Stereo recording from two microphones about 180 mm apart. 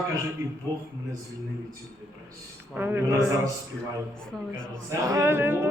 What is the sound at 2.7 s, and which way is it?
Speech, 10° right (ahead or behind).